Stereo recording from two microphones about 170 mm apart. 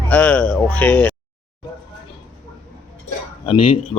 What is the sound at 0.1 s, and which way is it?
Speech, 10° left (ahead or behind).